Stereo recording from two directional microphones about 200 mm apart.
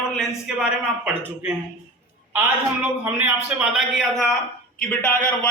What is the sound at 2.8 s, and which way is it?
A man's voice, 10° right (ahead or behind).